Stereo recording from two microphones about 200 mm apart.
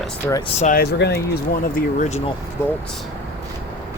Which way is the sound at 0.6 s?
45° left (ahead or behind).